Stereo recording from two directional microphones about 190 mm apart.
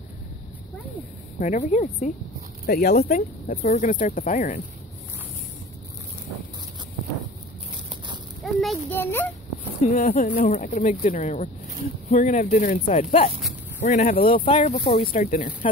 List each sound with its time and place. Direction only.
1.4 s speech: 40° left (ahead or behind)
2.6 s speech: 55° left (ahead or behind)
8.5 s speech: centre (ahead or behind)
9.0 s speech: 10° left (ahead or behind)
9.9 s speech: 45° left (ahead or behind)